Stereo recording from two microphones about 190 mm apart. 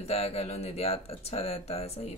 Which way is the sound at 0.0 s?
30° left (ahead or behind).